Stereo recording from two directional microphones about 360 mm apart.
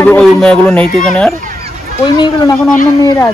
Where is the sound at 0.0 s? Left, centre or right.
Centre.